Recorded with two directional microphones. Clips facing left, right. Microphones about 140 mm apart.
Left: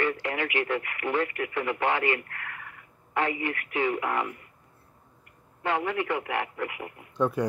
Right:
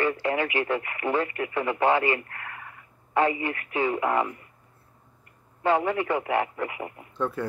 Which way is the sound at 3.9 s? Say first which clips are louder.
Right 7 dB; 30° right (ahead or behind).